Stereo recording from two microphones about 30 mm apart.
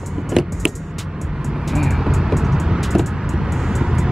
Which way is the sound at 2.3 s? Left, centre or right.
Centre.